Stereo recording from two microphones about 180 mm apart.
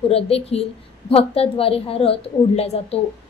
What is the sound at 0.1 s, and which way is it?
A woman's voice, 35° left (ahead or behind).